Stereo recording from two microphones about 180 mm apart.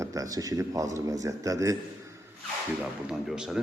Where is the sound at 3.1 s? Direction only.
5° right (ahead or behind).